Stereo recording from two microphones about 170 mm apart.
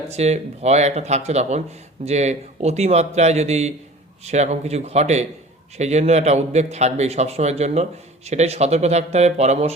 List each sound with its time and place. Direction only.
0.1 s speech: 40° right (ahead or behind)